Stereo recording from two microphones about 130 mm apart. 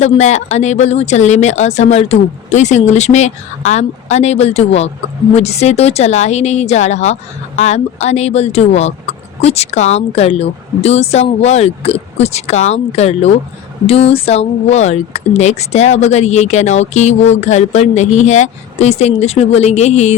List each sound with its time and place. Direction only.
0.0 s speech: 60° left (ahead or behind)